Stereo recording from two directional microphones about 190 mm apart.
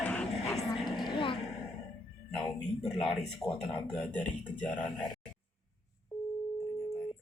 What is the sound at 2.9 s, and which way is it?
Speech, centre (ahead or behind).